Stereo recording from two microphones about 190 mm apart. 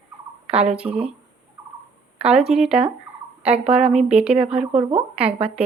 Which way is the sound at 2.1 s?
5° right (ahead or behind).